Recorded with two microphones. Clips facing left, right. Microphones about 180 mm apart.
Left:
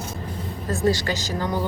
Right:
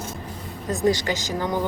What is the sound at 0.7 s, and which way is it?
Speech, 20° right (ahead or behind).